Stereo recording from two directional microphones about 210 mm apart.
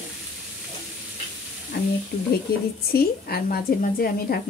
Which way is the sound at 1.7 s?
50° left (ahead or behind).